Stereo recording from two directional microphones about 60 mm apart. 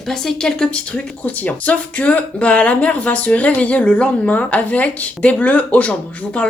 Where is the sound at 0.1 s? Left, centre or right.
Centre.